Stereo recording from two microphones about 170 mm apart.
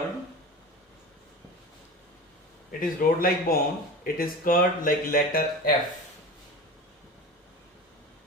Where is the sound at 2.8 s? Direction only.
60° left (ahead or behind).